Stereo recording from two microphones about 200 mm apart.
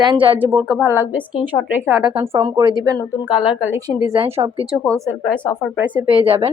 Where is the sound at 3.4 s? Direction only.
5° right (ahead or behind).